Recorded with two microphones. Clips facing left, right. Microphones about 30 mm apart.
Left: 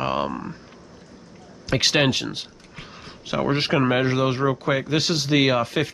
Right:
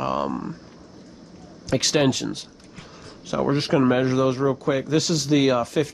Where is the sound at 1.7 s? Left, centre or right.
Left.